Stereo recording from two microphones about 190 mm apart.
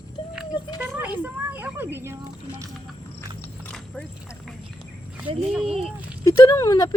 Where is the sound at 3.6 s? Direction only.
5° left (ahead or behind).